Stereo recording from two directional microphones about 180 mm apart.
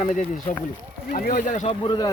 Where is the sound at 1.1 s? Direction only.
45° left (ahead or behind).